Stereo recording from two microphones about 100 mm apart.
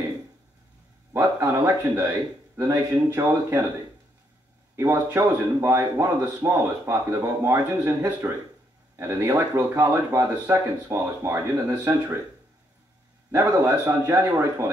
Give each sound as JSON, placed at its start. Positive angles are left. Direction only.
{"t": 1.1, "sound": "a sound", "side_deg": -30}
{"t": 2.5, "sound": "a man's voice", "side_deg": -25}
{"t": 4.7, "sound": "a man's voice", "side_deg": -25}
{"t": 13.3, "sound": "a man's voice", "side_deg": -25}